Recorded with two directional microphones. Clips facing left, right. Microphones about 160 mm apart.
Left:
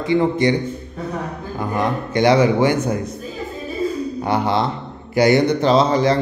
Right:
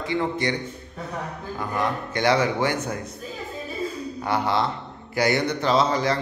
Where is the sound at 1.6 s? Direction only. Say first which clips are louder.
Left 5 dB; 20° left (ahead or behind).